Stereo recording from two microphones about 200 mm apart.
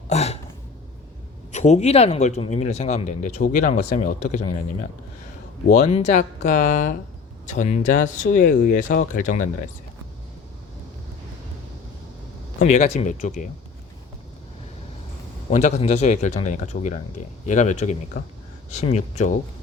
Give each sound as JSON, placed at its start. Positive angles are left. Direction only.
{"t": 0.1, "sound": "a sound", "side_deg": 30}
{"t": 1.5, "sound": "speech", "side_deg": 35}
{"t": 12.5, "sound": "speech", "side_deg": 35}
{"t": 15.4, "sound": "speech", "side_deg": 35}